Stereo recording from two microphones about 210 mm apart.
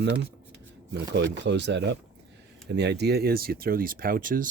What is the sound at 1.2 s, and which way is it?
Speech, 55° right (ahead or behind).